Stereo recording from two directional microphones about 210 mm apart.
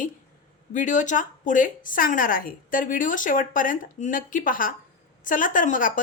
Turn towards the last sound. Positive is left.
turn(degrees=40)  # may be behind; listen again after turning